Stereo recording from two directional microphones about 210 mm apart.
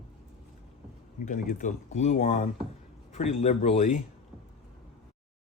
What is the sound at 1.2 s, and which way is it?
Speech, 40° left (ahead or behind).